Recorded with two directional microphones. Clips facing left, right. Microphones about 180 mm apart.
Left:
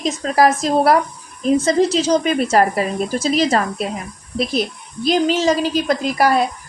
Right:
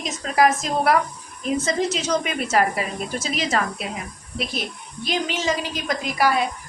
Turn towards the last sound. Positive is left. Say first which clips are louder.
# left 5 dB
turn(degrees=40)  # may be behind; listen again after turning